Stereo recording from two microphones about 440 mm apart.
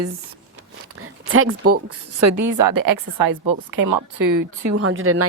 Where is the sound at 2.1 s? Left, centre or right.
Right.